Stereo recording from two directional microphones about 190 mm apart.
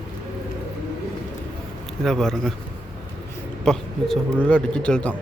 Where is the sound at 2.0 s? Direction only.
5° left (ahead or behind).